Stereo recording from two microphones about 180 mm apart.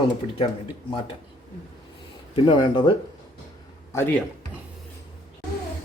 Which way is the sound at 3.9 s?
15° left (ahead or behind).